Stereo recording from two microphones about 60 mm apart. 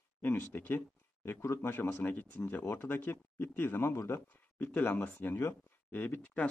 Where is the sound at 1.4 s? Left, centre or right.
Left.